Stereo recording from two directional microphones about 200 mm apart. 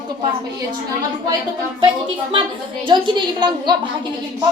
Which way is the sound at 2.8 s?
25° right (ahead or behind).